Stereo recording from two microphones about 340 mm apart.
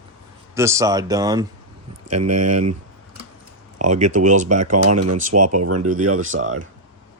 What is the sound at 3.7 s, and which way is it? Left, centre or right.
Speech, right.